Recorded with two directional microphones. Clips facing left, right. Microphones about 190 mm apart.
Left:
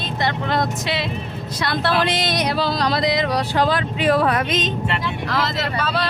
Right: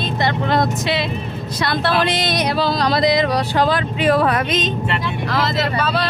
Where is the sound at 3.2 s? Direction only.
55° right (ahead or behind).